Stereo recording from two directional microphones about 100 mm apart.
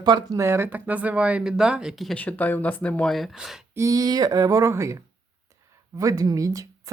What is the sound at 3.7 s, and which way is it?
Speech, 35° right (ahead or behind).